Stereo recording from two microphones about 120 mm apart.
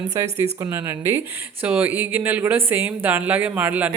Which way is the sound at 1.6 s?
10° right (ahead or behind).